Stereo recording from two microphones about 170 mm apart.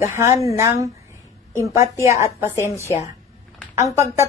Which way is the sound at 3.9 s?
15° right (ahead or behind).